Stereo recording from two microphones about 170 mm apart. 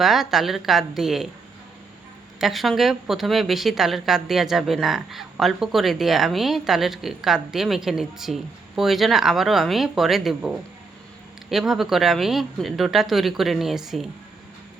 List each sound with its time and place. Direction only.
0.0 s a woman's voice: centre (ahead or behind)
2.4 s a woman's voice: centre (ahead or behind)